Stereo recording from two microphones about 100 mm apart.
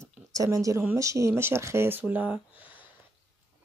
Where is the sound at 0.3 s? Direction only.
35° right (ahead or behind); by 2.4 s 10° right (ahead or behind).